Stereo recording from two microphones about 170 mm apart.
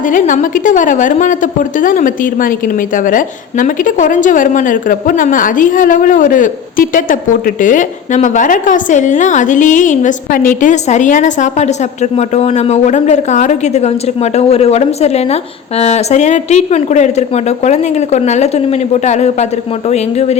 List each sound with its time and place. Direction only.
0.1 s a woman's voice: 50° left (ahead or behind)